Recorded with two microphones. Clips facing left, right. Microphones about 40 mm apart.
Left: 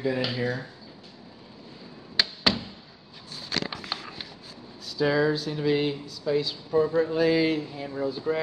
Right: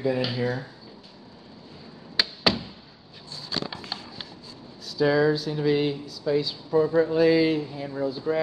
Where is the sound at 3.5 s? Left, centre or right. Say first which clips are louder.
Left 1 dB; left.